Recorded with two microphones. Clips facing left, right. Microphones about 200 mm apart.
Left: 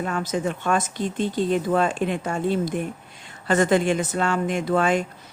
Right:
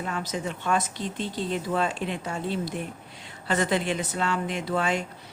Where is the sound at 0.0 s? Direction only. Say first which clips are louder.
Left 6 dB; 50° left (ahead or behind).